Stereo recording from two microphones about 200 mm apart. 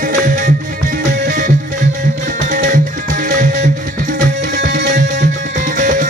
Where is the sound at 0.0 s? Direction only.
45° right (ahead or behind).